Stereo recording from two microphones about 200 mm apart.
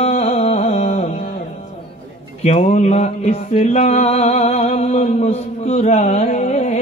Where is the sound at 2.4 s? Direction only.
35° left (ahead or behind).